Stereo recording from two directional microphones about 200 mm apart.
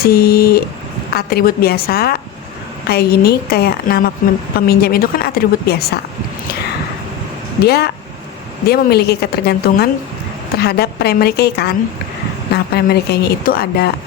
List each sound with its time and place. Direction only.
0.0 s a woman's voice: 50° left (ahead or behind)
7.6 s a woman's voice: 55° left (ahead or behind)